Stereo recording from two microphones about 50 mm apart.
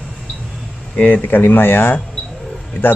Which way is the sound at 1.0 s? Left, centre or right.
Left.